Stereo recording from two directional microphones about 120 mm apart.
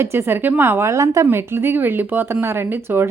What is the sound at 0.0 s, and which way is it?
A woman's voice, 20° right (ahead or behind).